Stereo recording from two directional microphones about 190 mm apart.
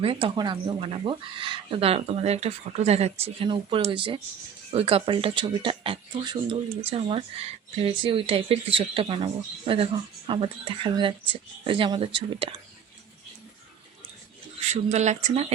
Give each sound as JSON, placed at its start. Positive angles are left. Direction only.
{"t": 0.0, "sound": "speech", "side_deg": -30}
{"t": 14.7, "sound": "speech", "side_deg": -35}